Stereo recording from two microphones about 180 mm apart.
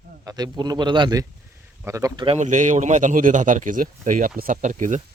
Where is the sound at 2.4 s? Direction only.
45° right (ahead or behind).